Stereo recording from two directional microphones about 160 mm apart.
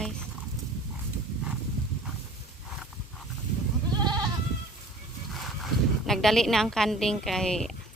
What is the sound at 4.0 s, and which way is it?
Goat, 25° right (ahead or behind).